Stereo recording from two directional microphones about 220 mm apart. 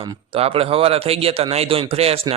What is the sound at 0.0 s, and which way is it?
A man's voice, 25° right (ahead or behind).